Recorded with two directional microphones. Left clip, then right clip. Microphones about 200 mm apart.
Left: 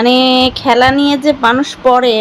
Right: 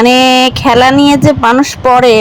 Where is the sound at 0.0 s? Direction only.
25° right (ahead or behind).